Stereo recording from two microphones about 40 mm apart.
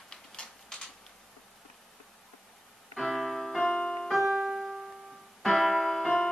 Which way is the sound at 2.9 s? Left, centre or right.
Centre.